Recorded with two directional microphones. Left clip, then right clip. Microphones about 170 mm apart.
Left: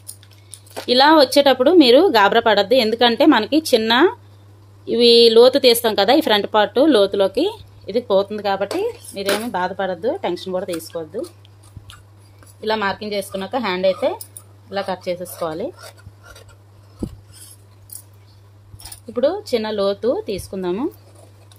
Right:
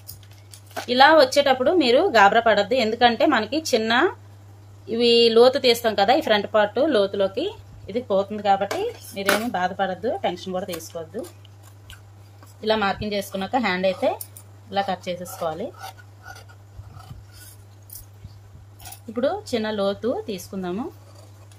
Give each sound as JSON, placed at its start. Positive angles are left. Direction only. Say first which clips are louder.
{"t": 0.8, "sound": "speech", "louder": "left 2 dB", "side_deg": 50}
{"t": 12.5, "sound": "speech", "louder": "left 1 dB", "side_deg": 30}
{"t": 19.1, "sound": "speech", "louder": "left 5 dB", "side_deg": 35}